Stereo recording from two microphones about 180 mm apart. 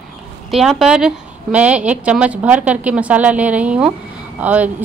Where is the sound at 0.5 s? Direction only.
Centre (ahead or behind).